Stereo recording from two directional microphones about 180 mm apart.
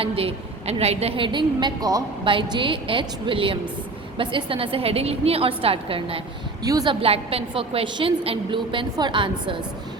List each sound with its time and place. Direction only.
0.0 s a woman's voice: 30° right (ahead or behind)
6.7 s a woman's voice: 20° right (ahead or behind)
7.0 s a woman's voice: 30° right (ahead or behind)